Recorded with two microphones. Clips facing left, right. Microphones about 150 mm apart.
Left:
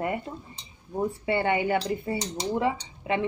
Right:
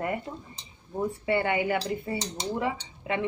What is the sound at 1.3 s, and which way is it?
Speech, 30° left (ahead or behind).